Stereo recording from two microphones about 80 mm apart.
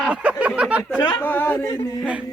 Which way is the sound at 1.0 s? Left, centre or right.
Left.